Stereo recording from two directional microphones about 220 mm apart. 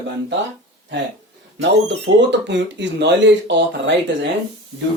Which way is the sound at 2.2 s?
55° right (ahead or behind).